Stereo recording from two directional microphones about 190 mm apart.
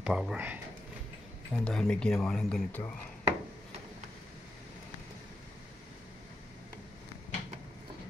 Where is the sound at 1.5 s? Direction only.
5° left (ahead or behind).